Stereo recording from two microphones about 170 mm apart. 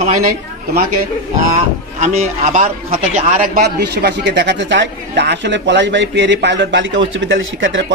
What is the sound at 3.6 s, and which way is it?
Speech, 75° right (ahead or behind).